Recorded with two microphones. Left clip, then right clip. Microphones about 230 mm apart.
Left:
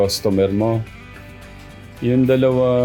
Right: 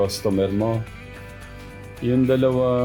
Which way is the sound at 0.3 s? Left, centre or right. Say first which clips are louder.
Left 4 dB; left.